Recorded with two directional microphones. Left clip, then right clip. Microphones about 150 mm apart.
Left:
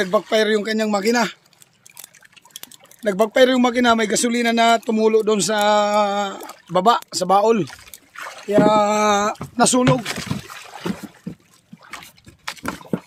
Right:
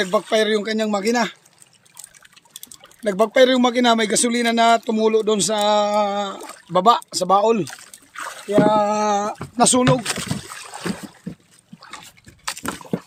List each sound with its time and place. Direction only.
0.0 s speech: 5° left (ahead or behind)
3.0 s speech: centre (ahead or behind)
7.7 s a sound: 50° right (ahead or behind)
8.5 s a sound: 20° left (ahead or behind)
9.6 s speech: 5° left (ahead or behind)
10.0 s speech: 45° right (ahead or behind)
10.8 s boat: 40° right (ahead or behind)